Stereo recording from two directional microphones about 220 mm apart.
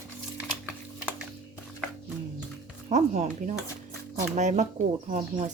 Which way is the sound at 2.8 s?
30° right (ahead or behind).